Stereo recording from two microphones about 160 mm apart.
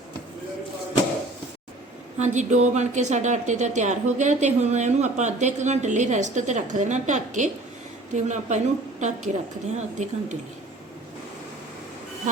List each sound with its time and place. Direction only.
2.1 s speech: 45° right (ahead or behind)